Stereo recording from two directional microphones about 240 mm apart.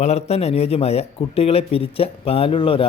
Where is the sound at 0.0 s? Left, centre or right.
Left.